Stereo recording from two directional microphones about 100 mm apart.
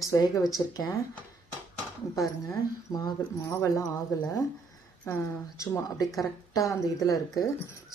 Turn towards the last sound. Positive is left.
turn(degrees=35)  # may be behind; listen again after turning